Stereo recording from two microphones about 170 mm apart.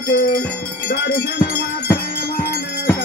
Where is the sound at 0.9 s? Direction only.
60° left (ahead or behind).